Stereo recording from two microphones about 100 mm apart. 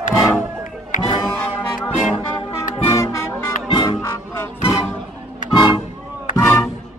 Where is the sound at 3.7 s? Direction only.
40° left (ahead or behind).